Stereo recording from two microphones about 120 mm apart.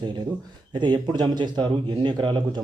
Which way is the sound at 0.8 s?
40° right (ahead or behind).